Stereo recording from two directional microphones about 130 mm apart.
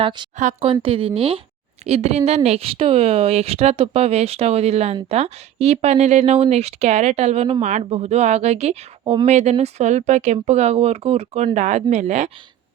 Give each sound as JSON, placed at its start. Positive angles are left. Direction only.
{"t": 0.0, "sound": "a woman's voice", "side_deg": -35}